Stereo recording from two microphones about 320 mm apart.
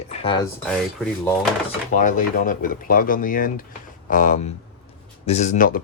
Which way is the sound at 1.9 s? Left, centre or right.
Left.